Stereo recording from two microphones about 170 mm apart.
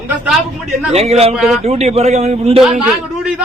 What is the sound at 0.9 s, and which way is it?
Speech, 35° right (ahead or behind).